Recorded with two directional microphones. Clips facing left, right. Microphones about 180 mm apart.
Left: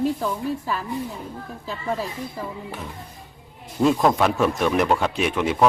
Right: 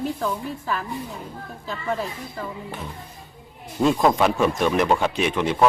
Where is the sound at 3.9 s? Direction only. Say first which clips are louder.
Even; centre (ahead or behind).